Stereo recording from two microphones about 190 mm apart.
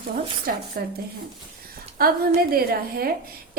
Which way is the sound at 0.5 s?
55° right (ahead or behind).